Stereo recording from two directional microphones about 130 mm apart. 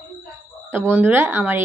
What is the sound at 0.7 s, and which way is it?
Speech, 15° right (ahead or behind).